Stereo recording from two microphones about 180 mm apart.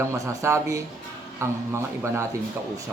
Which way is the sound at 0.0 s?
15° right (ahead or behind).